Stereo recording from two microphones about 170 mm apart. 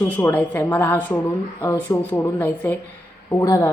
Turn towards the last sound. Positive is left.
turn(degrees=15)  # may be behind; listen again after turning